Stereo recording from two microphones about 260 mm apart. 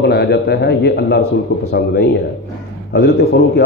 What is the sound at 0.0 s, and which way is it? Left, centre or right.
A man's voice, left.